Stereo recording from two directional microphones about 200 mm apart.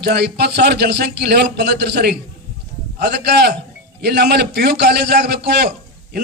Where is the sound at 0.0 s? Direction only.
55° right (ahead or behind).